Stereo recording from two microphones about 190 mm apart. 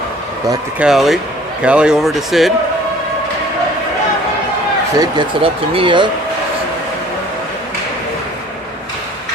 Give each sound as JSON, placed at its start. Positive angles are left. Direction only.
{"t": 0.8, "sound": "speech", "side_deg": 0}
{"t": 4.9, "sound": "speech", "side_deg": -25}